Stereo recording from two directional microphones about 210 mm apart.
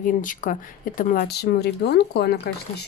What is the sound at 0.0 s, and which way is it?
Speech, 40° left (ahead or behind).